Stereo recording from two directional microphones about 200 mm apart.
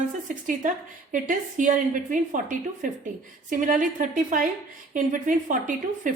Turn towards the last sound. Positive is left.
turn(degrees=-40)  # may be behind; listen again after turning